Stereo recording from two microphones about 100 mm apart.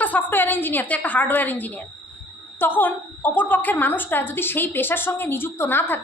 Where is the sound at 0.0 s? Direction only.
15° left (ahead or behind).